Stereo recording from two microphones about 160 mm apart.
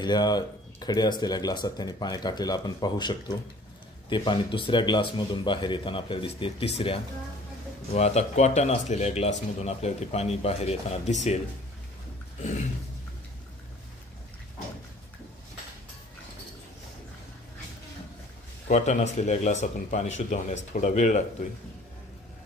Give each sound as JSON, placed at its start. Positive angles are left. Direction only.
{"t": 0.0, "sound": "speech", "side_deg": 25}
{"t": 18.7, "sound": "speech", "side_deg": 50}